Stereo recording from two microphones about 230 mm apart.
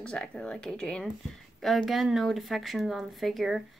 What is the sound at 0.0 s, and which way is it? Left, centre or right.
Speech, centre.